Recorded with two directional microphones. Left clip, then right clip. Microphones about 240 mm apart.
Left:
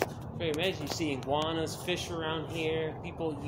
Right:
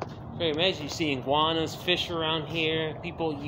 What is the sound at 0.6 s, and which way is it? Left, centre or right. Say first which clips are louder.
Speech: right 5 dB; right.